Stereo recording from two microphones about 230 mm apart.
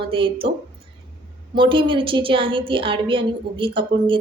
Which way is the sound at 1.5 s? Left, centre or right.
Right.